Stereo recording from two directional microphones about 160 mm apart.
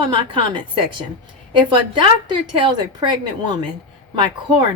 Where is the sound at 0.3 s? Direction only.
30° right (ahead or behind).